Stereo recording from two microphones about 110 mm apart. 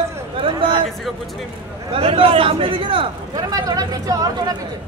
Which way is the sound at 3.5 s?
35° right (ahead or behind).